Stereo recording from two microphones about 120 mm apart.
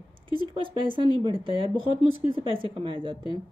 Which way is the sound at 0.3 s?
45° right (ahead or behind).